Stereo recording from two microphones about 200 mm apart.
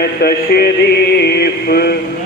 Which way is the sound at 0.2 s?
50° left (ahead or behind).